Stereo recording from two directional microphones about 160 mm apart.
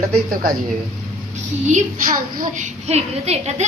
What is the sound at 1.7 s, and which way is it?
A woman's voice, 60° right (ahead or behind).